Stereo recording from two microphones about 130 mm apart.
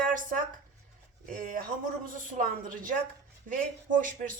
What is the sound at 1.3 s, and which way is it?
A woman's voice, 90° right.